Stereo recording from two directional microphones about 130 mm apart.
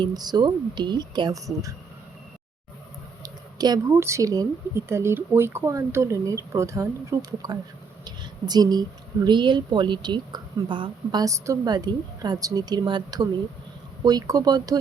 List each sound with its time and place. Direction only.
0.0 s speech: 30° right (ahead or behind)
3.2 s speech: 30° right (ahead or behind)